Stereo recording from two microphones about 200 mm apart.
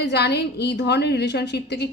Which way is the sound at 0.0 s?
55° left (ahead or behind).